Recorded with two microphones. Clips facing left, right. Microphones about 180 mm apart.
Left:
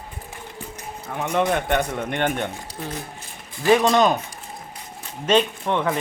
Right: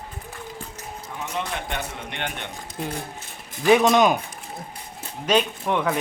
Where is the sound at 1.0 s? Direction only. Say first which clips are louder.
Left 9 dB; 60° left (ahead or behind); by 2.5 s 45° left (ahead or behind).